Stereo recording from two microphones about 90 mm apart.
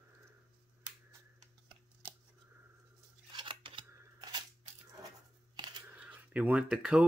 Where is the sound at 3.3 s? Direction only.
60° right (ahead or behind).